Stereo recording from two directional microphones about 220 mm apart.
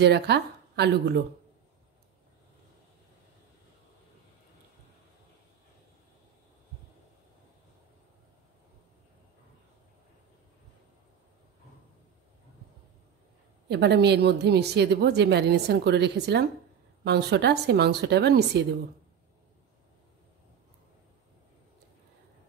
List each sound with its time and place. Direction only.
0.0 s speech: 50° right (ahead or behind)
13.7 s a woman's voice: 50° right (ahead or behind)